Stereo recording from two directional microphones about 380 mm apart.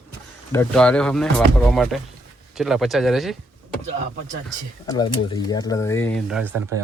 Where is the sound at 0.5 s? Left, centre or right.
Centre.